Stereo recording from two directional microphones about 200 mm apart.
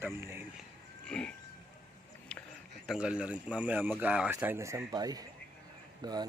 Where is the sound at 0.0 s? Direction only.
10° right (ahead or behind).